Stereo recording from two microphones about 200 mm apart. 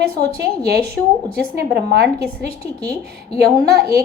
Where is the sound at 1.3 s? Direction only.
55° right (ahead or behind).